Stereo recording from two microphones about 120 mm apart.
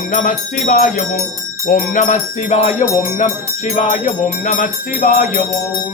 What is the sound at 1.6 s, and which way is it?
Music, 90° left.